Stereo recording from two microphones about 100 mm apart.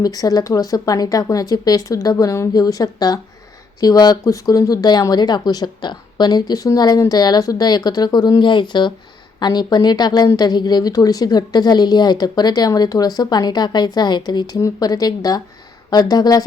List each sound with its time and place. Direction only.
0.0 s a woman's voice: 40° left (ahead or behind)